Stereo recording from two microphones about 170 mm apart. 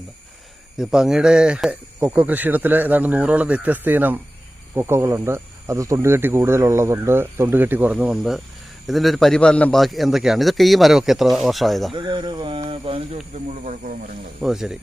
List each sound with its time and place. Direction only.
0.8 s a man's voice: 5° right (ahead or behind)
11.9 s speech: 25° right (ahead or behind); by 14.1 s 50° right (ahead or behind)
14.4 s a man's voice: 5° right (ahead or behind)